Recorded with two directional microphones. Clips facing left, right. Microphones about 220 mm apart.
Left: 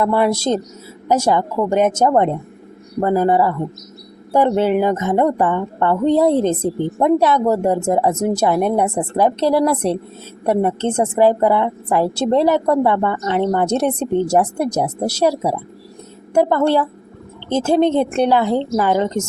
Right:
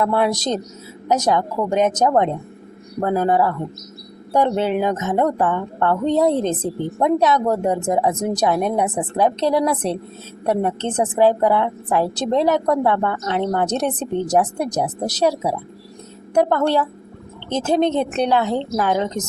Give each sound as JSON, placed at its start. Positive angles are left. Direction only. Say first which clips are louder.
{"t": 0.0, "sound": "a woman's voice", "louder": "left 3 dB", "side_deg": 10}